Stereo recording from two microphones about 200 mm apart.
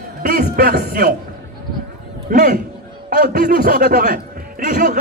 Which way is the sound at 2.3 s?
45° right (ahead or behind).